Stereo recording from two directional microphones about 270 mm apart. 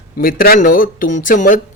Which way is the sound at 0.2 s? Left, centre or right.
Left.